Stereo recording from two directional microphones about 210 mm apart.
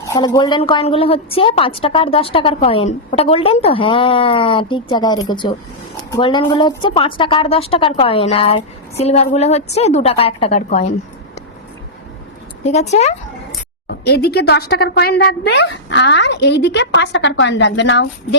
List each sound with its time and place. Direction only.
0.0 s a woman's voice: 15° left (ahead or behind); by 10.8 s 30° left (ahead or behind)
12.6 s speech: 30° left (ahead or behind)
13.8 s speech: 50° left (ahead or behind)